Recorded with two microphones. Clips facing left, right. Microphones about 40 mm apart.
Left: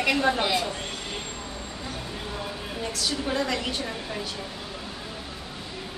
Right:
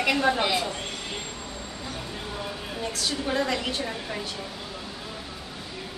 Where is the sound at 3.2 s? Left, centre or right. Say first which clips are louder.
Right 2 dB; centre.